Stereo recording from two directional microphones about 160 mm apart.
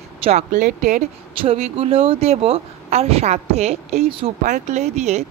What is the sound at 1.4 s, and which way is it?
A woman's voice, 35° right (ahead or behind).